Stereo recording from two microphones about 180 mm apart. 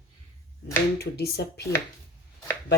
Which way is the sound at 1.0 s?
65° left (ahead or behind).